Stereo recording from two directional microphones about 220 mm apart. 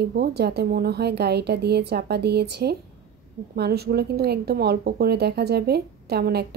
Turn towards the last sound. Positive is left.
turn(degrees=-45)  # may be behind; listen again after turning